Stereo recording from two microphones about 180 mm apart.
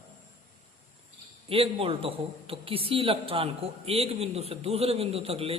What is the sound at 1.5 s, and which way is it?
A woman's voice, 30° right (ahead or behind).